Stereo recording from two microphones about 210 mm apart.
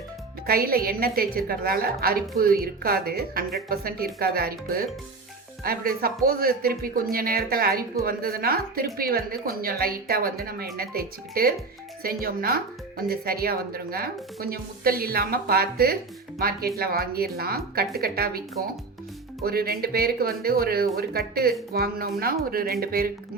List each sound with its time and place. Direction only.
0.4 s a woman's voice: 45° right (ahead or behind)